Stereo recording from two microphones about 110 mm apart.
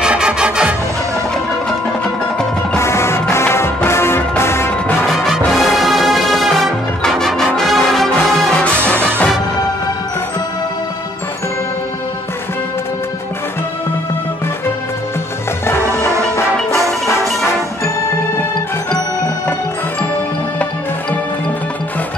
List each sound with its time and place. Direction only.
0.0 s music: 10° right (ahead or behind)
2.8 s music: 25° left (ahead or behind)
5.0 s music: centre (ahead or behind)
15.6 s music: 25° left (ahead or behind)